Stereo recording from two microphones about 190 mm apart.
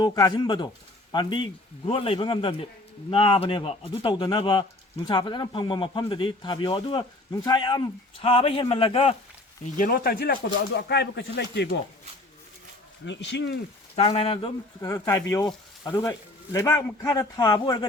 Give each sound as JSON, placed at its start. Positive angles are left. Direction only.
{"t": 0.0, "sound": "a man's voice", "side_deg": 20}
{"t": 9.7, "sound": "speech", "side_deg": 45}
{"t": 13.1, "sound": "speech", "side_deg": 70}
{"t": 13.9, "sound": "speech", "side_deg": 35}
{"t": 14.8, "sound": "speech", "side_deg": 15}